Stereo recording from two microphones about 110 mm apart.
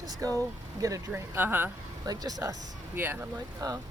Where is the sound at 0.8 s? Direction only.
30° right (ahead or behind).